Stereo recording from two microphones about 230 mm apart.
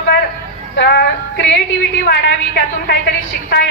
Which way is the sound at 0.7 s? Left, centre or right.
Left.